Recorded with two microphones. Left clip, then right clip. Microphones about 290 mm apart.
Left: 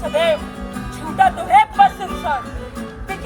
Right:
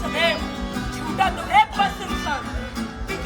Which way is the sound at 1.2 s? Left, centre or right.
Centre.